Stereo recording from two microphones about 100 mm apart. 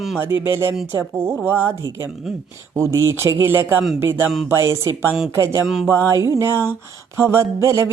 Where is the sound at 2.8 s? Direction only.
30° right (ahead or behind).